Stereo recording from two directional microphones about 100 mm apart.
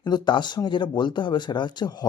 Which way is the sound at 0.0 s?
50° left (ahead or behind).